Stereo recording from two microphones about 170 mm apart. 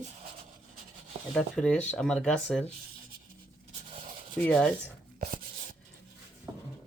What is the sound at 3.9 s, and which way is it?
Rub, 35° right (ahead or behind).